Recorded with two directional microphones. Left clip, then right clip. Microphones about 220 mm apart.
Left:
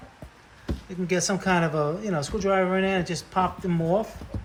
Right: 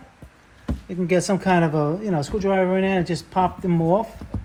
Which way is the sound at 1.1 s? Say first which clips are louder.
Right 4 dB; 25° right (ahead or behind).